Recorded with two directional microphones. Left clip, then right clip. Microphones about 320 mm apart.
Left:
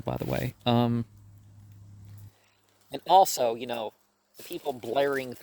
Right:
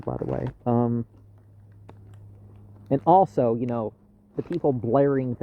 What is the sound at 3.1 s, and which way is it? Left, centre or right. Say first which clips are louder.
Speech: right 2 dB; left.